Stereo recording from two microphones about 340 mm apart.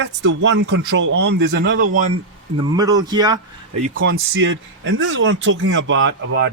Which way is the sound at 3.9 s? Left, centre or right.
Right.